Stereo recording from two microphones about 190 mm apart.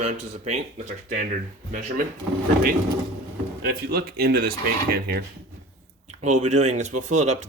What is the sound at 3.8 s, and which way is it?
Speech, 55° right (ahead or behind).